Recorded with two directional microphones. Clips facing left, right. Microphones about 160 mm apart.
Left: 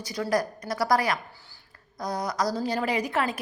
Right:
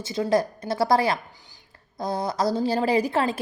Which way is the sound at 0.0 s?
25° right (ahead or behind).